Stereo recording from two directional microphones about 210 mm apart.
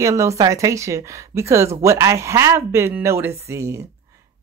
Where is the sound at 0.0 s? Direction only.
15° right (ahead or behind).